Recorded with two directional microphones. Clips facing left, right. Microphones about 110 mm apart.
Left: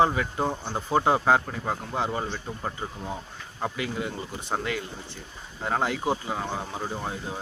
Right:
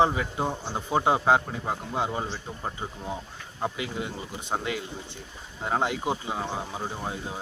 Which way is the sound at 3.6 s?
20° right (ahead or behind).